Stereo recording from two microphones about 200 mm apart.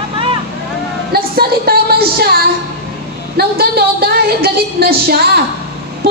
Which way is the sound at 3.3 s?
50° right (ahead or behind).